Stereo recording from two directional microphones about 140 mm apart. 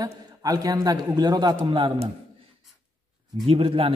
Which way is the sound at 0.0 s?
25° right (ahead or behind).